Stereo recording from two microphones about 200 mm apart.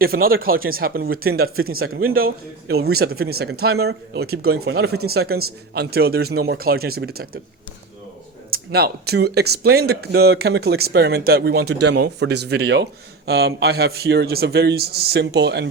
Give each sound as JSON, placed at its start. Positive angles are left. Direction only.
{"t": 0.0, "sound": "speech", "side_deg": -50}
{"t": 1.5, "sound": "speech", "side_deg": -90}
{"t": 2.1, "sound": "speech", "side_deg": -50}
{"t": 4.6, "sound": "speech", "side_deg": -75}
{"t": 5.0, "sound": "speech", "side_deg": -50}
{"t": 8.4, "sound": "speech", "side_deg": -50}